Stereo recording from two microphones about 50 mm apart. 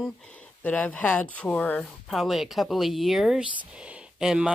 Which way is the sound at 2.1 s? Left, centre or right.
Centre.